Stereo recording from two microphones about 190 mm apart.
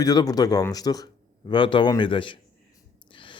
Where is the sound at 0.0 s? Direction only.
20° left (ahead or behind).